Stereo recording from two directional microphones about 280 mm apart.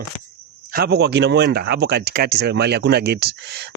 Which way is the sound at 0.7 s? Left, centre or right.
Right.